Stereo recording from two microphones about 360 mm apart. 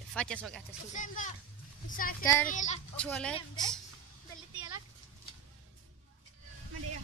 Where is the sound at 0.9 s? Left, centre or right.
Left.